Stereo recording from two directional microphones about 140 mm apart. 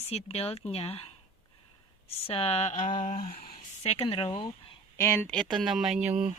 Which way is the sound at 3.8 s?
45° left (ahead or behind).